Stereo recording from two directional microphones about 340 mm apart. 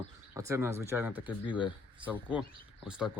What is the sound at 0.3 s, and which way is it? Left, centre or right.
Speech, centre.